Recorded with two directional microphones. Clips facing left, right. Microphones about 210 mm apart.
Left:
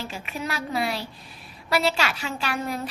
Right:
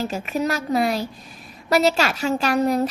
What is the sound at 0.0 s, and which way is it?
A woman's voice, 45° right (ahead or behind).